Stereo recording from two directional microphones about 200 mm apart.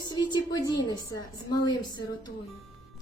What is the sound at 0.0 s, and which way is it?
A woman's voice, 20° left (ahead or behind).